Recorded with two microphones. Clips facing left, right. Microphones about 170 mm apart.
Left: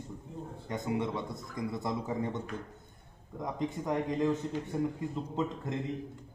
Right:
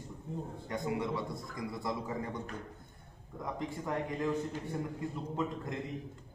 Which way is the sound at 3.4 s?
20° left (ahead or behind).